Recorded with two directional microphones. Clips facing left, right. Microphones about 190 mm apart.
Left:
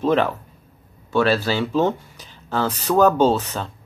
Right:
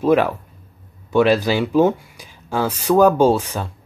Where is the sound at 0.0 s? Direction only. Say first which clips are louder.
Right 3 dB; 10° right (ahead or behind).